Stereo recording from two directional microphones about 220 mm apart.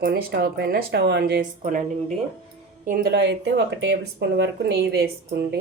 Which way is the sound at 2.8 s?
40° right (ahead or behind).